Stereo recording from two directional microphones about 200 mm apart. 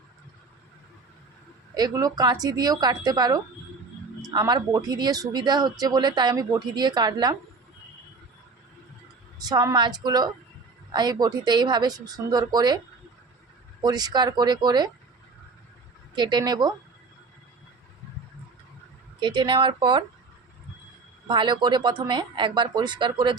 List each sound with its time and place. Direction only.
1.7 s speech: 20° right (ahead or behind)
9.4 s speech: 20° right (ahead or behind)
13.8 s speech: 20° right (ahead or behind)
16.1 s speech: 20° right (ahead or behind)
19.2 s speech: 25° right (ahead or behind)
21.2 s speech: 25° right (ahead or behind)